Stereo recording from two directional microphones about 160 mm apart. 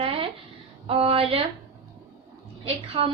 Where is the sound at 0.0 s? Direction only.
35° right (ahead or behind).